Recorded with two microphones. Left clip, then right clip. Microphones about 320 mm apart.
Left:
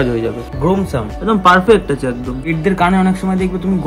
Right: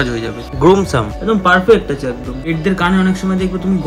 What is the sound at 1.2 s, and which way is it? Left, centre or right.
A man's voice, centre.